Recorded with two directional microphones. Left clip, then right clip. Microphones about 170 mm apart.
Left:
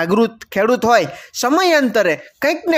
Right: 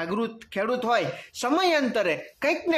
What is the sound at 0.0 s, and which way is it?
Speech, 45° left (ahead or behind).